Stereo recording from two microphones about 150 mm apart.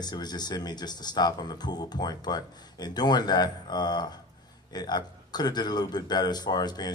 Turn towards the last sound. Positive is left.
turn(degrees=25)  # may be behind; listen again after turning